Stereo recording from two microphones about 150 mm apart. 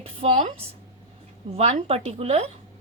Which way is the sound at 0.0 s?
45° right (ahead or behind).